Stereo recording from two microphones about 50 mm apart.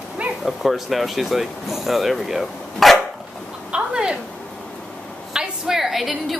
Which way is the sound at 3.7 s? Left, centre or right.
Right.